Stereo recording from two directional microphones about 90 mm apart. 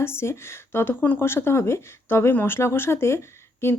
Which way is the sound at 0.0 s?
30° left (ahead or behind).